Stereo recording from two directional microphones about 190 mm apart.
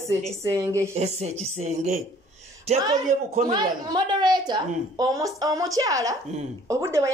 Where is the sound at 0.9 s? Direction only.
35° right (ahead or behind).